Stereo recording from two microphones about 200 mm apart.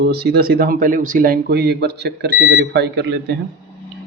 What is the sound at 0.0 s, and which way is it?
Speech, 50° right (ahead or behind).